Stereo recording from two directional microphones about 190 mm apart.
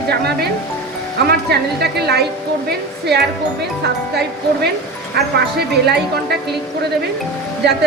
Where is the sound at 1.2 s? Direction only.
60° right (ahead or behind).